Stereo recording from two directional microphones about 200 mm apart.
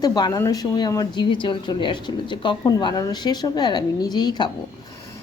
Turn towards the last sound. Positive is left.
turn(degrees=20)  # may be behind; listen again after turning